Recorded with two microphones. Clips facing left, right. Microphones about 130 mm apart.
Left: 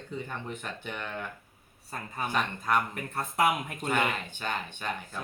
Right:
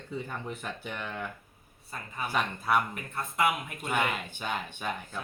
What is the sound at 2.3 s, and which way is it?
Speech, 5° right (ahead or behind).